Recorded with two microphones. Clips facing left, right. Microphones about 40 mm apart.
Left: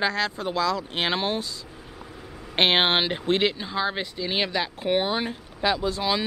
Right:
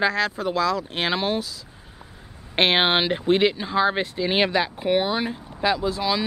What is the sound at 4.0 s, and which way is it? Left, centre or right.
Speech, right.